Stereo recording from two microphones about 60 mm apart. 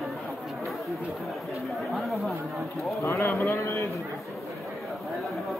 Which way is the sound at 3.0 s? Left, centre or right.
Left.